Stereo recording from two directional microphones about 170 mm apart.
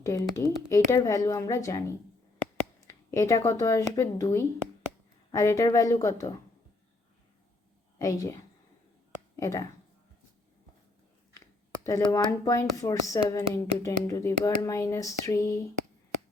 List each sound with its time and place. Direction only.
0.0 s speech: 20° left (ahead or behind)
7.9 s speech: 20° left (ahead or behind)
11.3 s speech: 20° left (ahead or behind)